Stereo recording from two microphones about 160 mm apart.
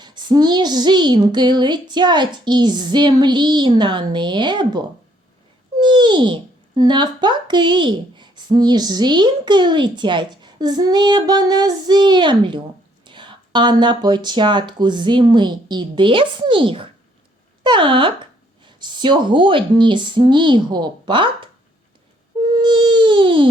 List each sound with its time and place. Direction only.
0.0 s a child's voice: 25° right (ahead or behind)
5.8 s a child's voice: 30° right (ahead or behind)
22.6 s a sound: 30° right (ahead or behind)